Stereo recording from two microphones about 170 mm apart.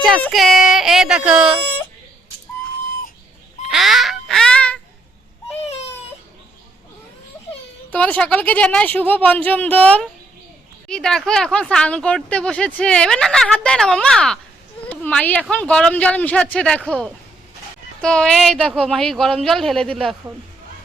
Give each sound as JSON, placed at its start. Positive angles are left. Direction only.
{"t": 0.0, "sound": "speech", "side_deg": 0}
{"t": 3.7, "sound": "honk", "side_deg": 0}
{"t": 5.5, "sound": "baby cry", "side_deg": 40}
{"t": 7.3, "sound": "a sound", "side_deg": 15}
{"t": 7.9, "sound": "a woman's voice", "side_deg": 10}
{"t": 18.0, "sound": "speech", "side_deg": 5}